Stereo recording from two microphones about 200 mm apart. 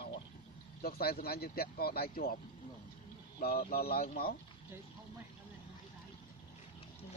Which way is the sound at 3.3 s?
45° left (ahead or behind).